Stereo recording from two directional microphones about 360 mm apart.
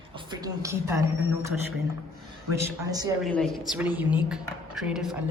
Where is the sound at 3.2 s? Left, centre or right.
Centre.